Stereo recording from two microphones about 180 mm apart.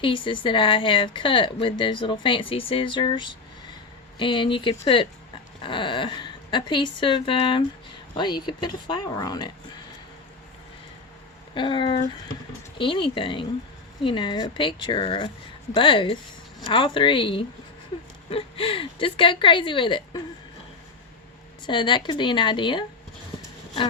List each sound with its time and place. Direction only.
0.0 s speech: 30° left (ahead or behind)
11.5 s speech: 25° left (ahead or behind)
21.7 s speech: 25° left (ahead or behind)